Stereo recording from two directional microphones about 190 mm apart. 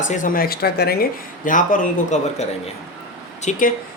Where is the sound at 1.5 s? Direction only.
45° left (ahead or behind).